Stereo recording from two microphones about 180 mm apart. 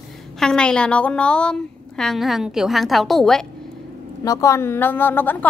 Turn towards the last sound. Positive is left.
turn(degrees=10)  # may be behind; listen again after turning